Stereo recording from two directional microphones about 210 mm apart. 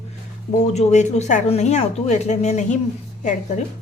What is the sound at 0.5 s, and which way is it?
Speech, 35° left (ahead or behind).